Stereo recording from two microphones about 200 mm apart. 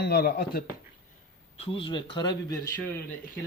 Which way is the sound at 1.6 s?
25° left (ahead or behind).